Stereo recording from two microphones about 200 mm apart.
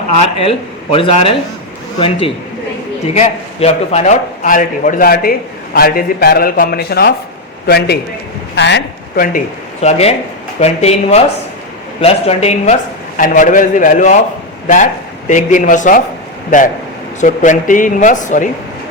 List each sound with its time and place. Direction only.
0.2 s a man's voice: 30° left (ahead or behind); by 9.2 s 60° left (ahead or behind)
9.8 s a man's voice: 30° left (ahead or behind)
15.3 s a man's voice: 40° left (ahead or behind)
17.2 s a man's voice: 40° left (ahead or behind)